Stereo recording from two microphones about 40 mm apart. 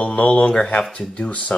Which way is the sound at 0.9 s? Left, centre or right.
Centre.